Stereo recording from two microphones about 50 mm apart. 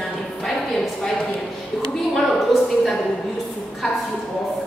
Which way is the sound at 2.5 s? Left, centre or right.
Centre.